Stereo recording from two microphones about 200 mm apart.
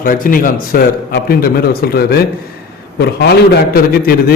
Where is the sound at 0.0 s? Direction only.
45° left (ahead or behind).